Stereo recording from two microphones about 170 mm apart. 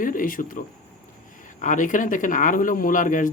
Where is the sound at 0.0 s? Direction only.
50° left (ahead or behind).